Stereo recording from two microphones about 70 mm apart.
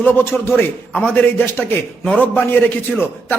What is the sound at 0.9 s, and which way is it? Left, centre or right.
A man's voice, centre.